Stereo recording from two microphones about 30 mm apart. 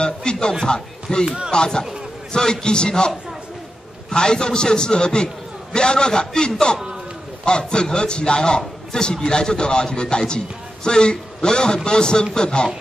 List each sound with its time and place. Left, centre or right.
0.0 s a sound: left
1.1 s a man's voice: left
4.1 s a man's voice: left